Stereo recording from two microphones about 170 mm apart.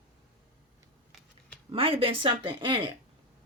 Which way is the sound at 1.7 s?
35° right (ahead or behind).